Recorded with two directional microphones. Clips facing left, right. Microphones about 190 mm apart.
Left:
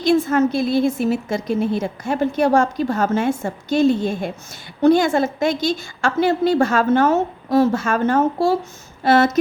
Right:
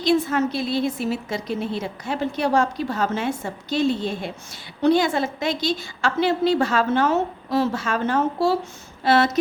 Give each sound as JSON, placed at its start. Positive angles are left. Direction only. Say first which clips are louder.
{"t": 0.0, "sound": "a woman's voice", "louder": "left 4 dB", "side_deg": 50}